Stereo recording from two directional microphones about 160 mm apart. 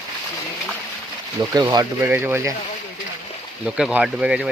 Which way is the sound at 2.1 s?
15° right (ahead or behind).